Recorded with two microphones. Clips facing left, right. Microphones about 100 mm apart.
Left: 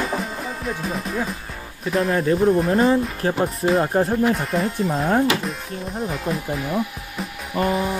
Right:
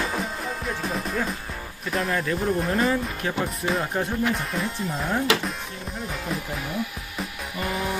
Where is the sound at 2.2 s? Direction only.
35° left (ahead or behind).